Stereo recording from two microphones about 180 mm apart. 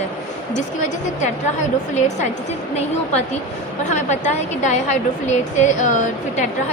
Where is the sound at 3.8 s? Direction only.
40° left (ahead or behind).